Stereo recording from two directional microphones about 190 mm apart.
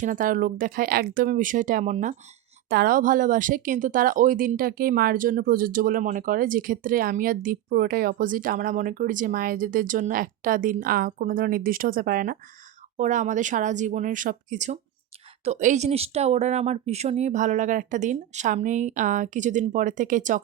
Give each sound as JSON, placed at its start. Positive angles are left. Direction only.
{"t": 0.0, "sound": "speech", "side_deg": -45}
{"t": 2.6, "sound": "speech", "side_deg": -50}